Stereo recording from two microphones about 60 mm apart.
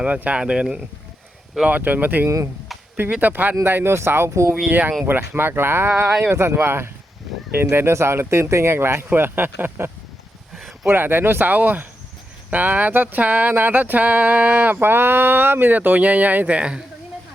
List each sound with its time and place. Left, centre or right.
0.2 s speech: right
1.6 s speech: right
4.6 s speech: right